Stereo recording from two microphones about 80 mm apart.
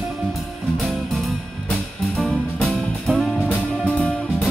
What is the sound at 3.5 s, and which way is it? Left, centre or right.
Music, centre.